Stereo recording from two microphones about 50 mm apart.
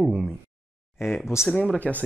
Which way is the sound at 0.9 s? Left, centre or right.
Left.